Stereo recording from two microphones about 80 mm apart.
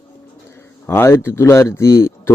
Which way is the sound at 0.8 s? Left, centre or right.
Left.